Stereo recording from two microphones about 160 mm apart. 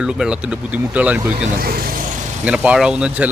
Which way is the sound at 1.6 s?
70° right (ahead or behind).